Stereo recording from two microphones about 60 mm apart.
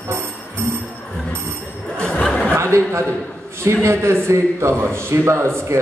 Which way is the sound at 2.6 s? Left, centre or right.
Right.